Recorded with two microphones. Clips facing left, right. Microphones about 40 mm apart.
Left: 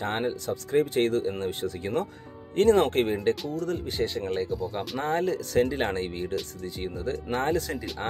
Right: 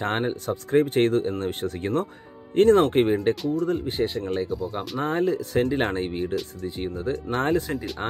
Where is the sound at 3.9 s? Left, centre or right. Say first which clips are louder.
Right 3 dB; centre.